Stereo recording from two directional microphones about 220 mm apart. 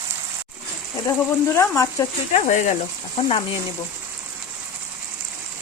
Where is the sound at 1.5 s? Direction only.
10° left (ahead or behind).